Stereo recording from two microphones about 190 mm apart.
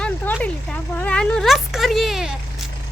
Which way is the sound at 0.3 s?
10° left (ahead or behind).